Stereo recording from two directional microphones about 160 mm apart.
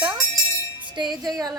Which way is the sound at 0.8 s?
30° right (ahead or behind).